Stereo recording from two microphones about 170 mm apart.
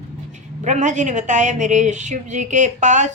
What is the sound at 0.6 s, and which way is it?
Speech, 45° right (ahead or behind).